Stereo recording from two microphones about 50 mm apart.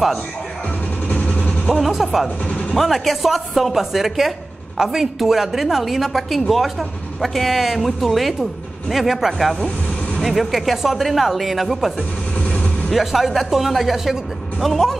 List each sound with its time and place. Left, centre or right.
1.0 s vehicle: left
1.7 s a woman's voice: centre
12.4 s vehicle: left
12.9 s a woman's voice: centre